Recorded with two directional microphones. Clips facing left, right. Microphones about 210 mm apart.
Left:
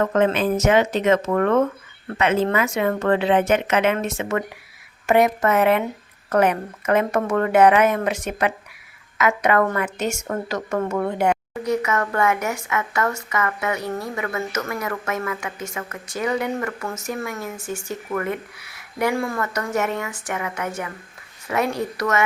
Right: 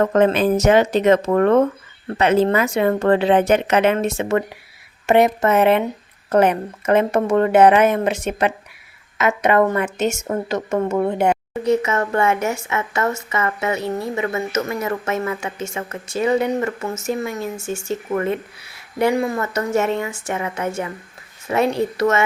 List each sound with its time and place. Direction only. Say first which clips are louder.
0.0 s a woman's voice: right 3 dB; 35° right (ahead or behind)